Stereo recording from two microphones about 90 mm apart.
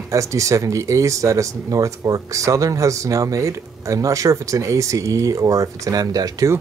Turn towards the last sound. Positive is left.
turn(degrees=-45)  # may be behind; listen again after turning